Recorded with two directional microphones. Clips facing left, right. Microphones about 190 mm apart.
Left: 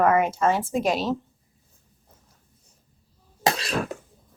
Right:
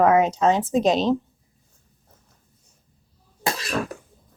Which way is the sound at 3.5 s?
25° left (ahead or behind).